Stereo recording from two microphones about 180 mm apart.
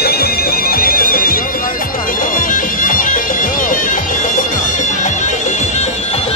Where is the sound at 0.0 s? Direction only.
60° left (ahead or behind).